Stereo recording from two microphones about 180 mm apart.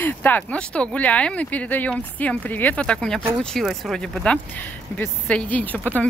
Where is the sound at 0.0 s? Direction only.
10° left (ahead or behind).